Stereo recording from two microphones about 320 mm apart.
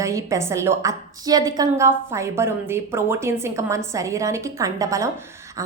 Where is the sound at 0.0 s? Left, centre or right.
Centre.